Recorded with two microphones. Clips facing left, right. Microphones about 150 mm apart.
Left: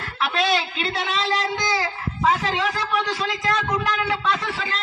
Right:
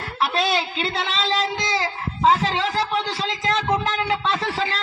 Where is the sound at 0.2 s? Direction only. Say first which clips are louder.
Even; 35° right (ahead or behind).